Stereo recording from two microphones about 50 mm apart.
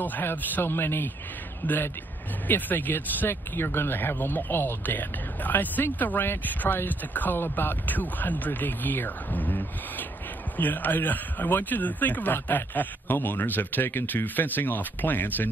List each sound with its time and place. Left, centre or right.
0.0 s speech: left
1.6 s speech: left
3.3 s speech: left